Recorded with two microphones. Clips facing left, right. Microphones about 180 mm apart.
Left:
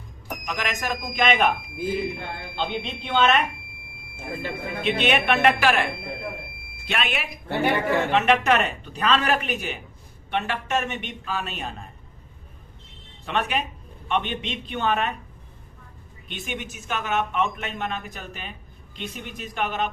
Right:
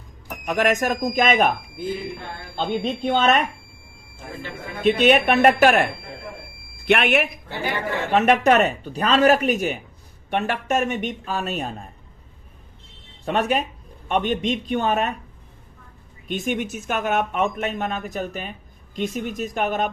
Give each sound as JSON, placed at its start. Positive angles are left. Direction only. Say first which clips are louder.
{"t": 0.4, "sound": "speech", "louder": "right 9 dB", "side_deg": -55}
{"t": 2.7, "sound": "speech", "louder": "right 4 dB", "side_deg": -45}
{"t": 4.8, "sound": "speech", "louder": "right 7 dB", "side_deg": -40}
{"t": 6.8, "sound": "speech", "louder": "right 9 dB", "side_deg": -60}
{"t": 7.4, "sound": "a woman's voice", "louder": "left 4 dB", "side_deg": 55}
{"t": 8.1, "sound": "speech", "louder": "right 6 dB", "side_deg": -45}
{"t": 13.2, "sound": "speech", "louder": "right 5 dB", "side_deg": -40}
{"t": 16.2, "sound": "speech", "louder": "right 9 dB", "side_deg": -45}